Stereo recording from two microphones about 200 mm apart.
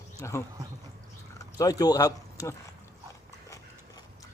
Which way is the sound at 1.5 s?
20° left (ahead or behind).